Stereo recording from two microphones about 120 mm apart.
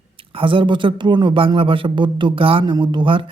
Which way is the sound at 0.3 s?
45° right (ahead or behind).